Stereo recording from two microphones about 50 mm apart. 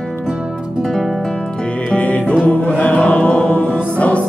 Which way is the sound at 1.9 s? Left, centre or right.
Left.